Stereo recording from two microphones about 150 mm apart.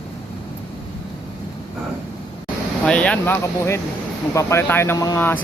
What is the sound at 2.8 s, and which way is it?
Speech, 10° left (ahead or behind).